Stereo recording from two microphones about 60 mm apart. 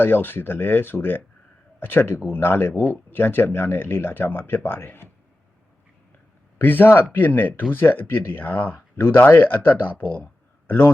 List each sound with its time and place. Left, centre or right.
0.0 s speech: left
6.6 s speech: left